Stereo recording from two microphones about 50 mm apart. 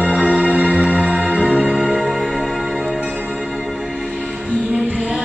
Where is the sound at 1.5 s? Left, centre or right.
Centre.